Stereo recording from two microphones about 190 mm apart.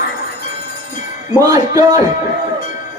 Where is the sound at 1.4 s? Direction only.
20° right (ahead or behind).